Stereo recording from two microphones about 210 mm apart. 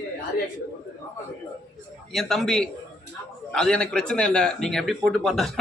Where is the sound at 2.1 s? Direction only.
Centre (ahead or behind).